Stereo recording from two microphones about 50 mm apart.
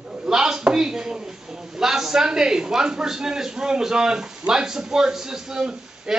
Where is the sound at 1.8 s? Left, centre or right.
Centre.